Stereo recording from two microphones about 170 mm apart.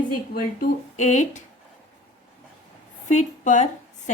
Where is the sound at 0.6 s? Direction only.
45° left (ahead or behind).